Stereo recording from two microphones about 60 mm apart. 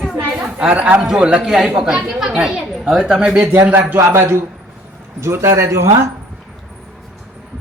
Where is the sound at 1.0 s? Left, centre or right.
Centre.